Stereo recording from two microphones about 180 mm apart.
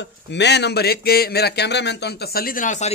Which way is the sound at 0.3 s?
70° left (ahead or behind).